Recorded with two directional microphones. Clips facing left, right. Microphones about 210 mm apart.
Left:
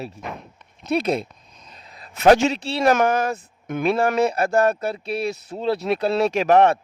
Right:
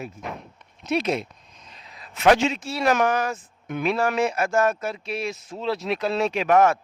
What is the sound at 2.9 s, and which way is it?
Speech, 50° left (ahead or behind).